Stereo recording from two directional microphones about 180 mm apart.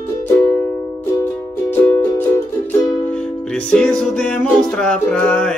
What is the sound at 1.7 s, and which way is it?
Music, 10° left (ahead or behind).